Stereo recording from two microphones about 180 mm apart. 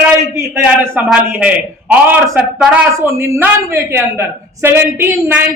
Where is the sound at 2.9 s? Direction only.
15° right (ahead or behind).